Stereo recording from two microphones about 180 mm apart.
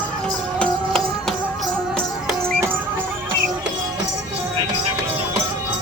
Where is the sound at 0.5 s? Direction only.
5° left (ahead or behind).